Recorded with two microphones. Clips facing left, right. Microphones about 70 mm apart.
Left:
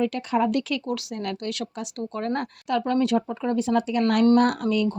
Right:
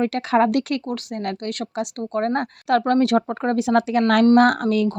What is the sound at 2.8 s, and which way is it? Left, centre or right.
Speech, right.